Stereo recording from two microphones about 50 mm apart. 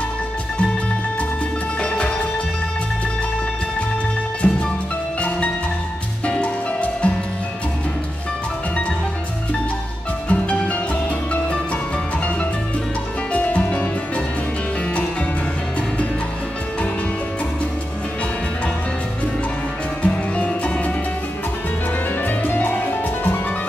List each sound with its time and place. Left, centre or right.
1.8 s music: centre
4.4 s music: centre
6.2 s music: left
10.2 s music: left
13.3 s music: left
20.0 s music: left
22.2 s music: left